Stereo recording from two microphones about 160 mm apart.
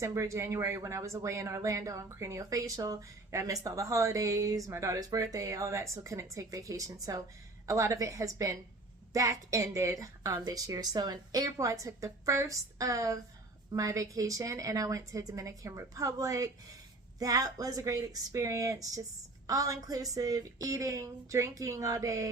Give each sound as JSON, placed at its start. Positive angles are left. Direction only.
{"t": 0.0, "sound": "speech", "side_deg": -20}